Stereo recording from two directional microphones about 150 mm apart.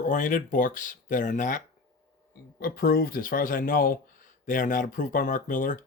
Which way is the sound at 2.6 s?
75° left (ahead or behind).